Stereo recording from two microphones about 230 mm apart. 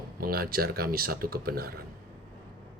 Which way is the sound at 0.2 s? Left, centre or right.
Right.